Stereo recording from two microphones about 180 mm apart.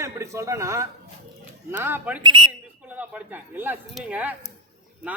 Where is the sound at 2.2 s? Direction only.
25° right (ahead or behind).